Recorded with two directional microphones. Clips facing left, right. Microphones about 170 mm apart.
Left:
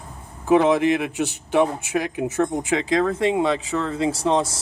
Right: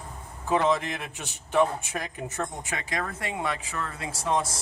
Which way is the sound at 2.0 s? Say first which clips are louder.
Left 10 dB; 90° left.